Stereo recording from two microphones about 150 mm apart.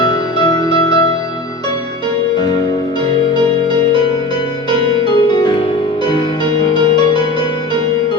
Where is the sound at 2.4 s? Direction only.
30° left (ahead or behind).